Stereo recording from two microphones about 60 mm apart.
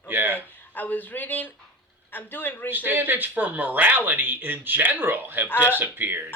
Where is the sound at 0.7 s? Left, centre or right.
Left.